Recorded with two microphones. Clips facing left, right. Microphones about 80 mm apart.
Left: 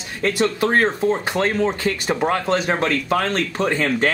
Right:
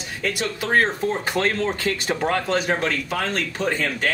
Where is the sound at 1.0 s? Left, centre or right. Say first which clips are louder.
Left 3 dB; left.